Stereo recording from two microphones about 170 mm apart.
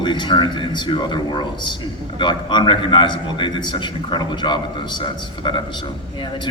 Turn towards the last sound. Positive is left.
turn(degrees=25)  # may be behind; listen again after turning